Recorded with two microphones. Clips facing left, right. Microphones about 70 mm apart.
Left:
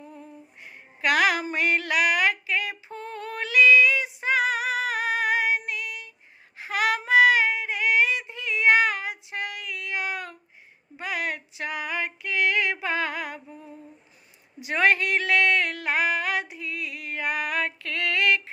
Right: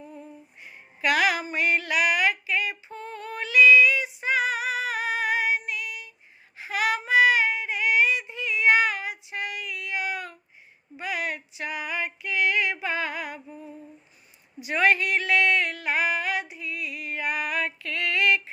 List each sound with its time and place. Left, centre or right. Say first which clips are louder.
0.6 s a sound: even; left
6.6 s child singing: left 1 dB; left
10.9 s female singing: even; left
14.7 s female singing: even; left